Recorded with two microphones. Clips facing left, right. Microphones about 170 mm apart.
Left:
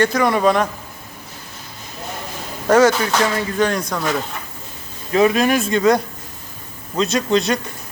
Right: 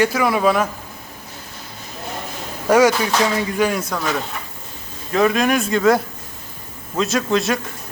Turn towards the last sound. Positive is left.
turn(degrees=0)  # may be behind; listen again after turning